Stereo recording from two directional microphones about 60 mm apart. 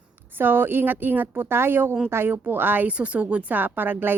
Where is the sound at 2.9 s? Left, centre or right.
Right.